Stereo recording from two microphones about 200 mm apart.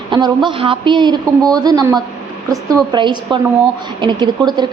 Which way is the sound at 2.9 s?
25° right (ahead or behind).